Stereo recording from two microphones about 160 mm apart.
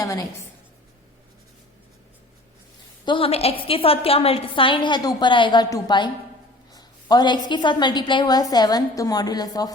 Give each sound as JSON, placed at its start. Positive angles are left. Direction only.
{"t": 0.0, "sound": "a woman's voice", "side_deg": 25}
{"t": 3.1, "sound": "a woman's voice", "side_deg": 35}